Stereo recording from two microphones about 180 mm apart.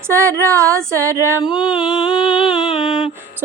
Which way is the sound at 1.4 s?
5° right (ahead or behind).